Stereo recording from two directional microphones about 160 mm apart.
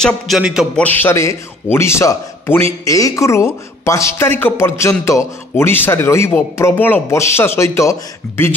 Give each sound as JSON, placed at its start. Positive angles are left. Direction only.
{"t": 0.0, "sound": "a man's voice", "side_deg": -5}
{"t": 0.7, "sound": "a man's voice", "side_deg": 10}